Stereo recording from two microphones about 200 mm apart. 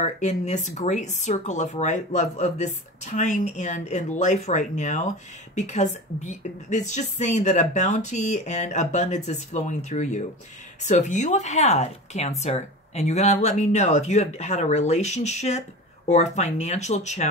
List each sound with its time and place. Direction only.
0.0 s speech: 35° left (ahead or behind)